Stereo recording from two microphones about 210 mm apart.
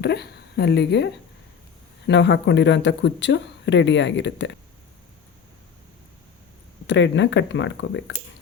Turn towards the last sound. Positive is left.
turn(degrees=60)  # may be behind; listen again after turning